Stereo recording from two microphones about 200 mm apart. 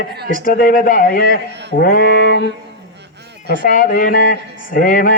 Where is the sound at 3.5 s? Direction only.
45° left (ahead or behind).